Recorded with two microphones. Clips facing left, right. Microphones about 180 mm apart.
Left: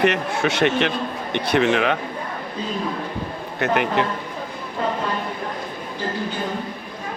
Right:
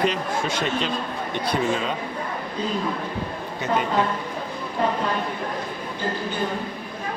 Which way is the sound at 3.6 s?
70° left (ahead or behind).